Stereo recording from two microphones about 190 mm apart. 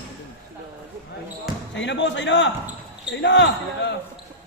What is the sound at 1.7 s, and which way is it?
Speech, 70° left (ahead or behind).